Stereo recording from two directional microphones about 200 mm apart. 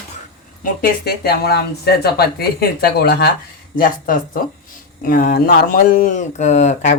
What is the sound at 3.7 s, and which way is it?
Speech, 45° left (ahead or behind).